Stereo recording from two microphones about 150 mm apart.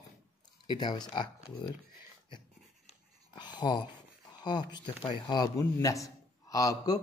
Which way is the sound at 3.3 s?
30° left (ahead or behind).